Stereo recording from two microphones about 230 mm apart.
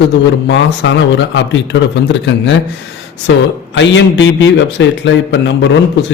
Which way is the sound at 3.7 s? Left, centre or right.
Left.